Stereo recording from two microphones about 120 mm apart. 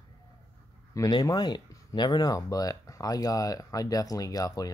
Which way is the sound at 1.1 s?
35° left (ahead or behind).